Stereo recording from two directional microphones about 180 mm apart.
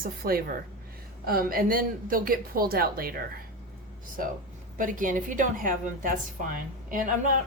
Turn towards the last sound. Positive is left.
turn(degrees=-45)  # may be behind; listen again after turning